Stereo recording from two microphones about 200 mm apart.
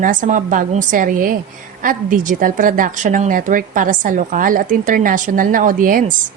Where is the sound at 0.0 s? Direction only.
40° right (ahead or behind).